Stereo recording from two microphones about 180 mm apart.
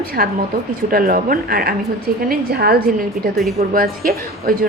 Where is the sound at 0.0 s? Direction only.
55° right (ahead or behind).